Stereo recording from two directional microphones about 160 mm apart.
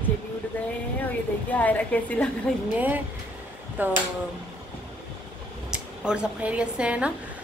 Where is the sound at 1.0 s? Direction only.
10° left (ahead or behind).